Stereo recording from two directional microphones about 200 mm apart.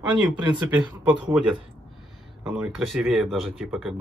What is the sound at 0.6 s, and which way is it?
Speech, 5° right (ahead or behind).